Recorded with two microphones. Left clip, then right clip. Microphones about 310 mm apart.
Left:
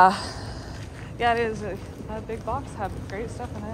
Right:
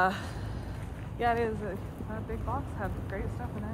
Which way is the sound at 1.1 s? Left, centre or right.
Centre.